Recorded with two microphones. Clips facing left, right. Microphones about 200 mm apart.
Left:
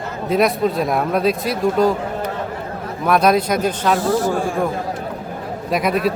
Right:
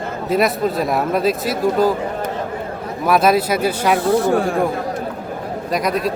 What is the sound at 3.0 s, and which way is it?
Speech, 5° right (ahead or behind).